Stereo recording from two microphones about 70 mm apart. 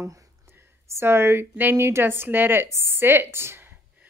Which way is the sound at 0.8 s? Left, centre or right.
Right.